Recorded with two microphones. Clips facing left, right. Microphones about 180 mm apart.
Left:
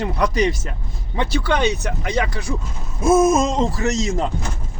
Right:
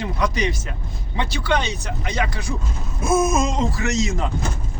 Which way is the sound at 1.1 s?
55° left (ahead or behind).